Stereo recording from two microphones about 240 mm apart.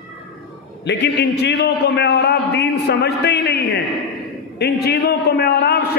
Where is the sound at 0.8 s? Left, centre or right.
Left.